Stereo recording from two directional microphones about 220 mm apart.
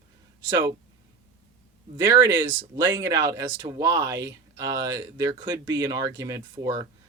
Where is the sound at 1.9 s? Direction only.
20° right (ahead or behind).